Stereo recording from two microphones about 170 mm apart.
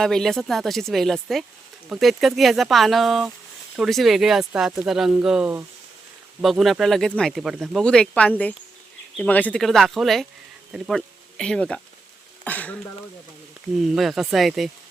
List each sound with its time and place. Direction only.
0.0 s speech: 5° left (ahead or behind)
13.7 s speech: centre (ahead or behind)